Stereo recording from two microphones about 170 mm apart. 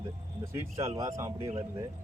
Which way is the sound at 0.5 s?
15° right (ahead or behind).